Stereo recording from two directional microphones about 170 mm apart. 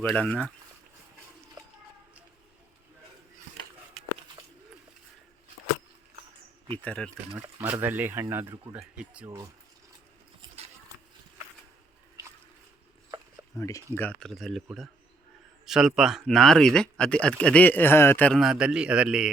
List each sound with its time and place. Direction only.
0.0 s speech: 5° left (ahead or behind)
6.8 s speech: 5° left (ahead or behind)
7.4 s speech: 10° right (ahead or behind)
13.6 s speech: 20° left (ahead or behind)
13.9 s speech: 10° left (ahead or behind)